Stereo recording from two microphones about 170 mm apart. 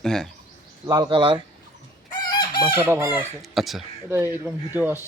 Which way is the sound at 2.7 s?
15° right (ahead or behind).